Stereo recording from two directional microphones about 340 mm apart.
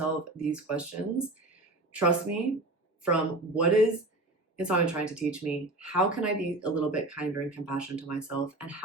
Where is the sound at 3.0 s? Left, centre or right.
Centre.